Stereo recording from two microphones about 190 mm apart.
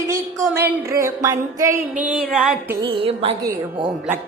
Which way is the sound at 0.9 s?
15° right (ahead or behind).